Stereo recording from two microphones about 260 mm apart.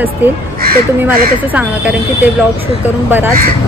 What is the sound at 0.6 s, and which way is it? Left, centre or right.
Speech, right.